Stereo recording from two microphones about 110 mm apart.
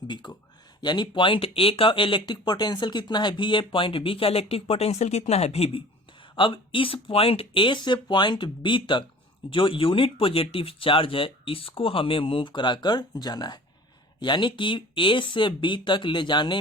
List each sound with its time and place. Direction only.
0.1 s speech: 45° left (ahead or behind); by 5.8 s 65° left (ahead or behind)
6.3 s speech: 50° left (ahead or behind)